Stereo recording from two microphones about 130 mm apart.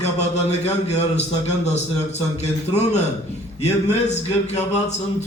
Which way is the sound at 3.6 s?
60° left (ahead or behind).